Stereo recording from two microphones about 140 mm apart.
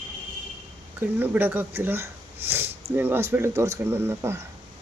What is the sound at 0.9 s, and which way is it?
Speech, 15° right (ahead or behind).